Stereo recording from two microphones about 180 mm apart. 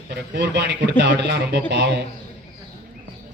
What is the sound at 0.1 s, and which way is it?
Speech, 65° right (ahead or behind).